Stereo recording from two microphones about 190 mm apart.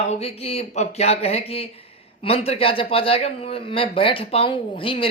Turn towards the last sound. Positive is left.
turn(degrees=30)  # may be behind; listen again after turning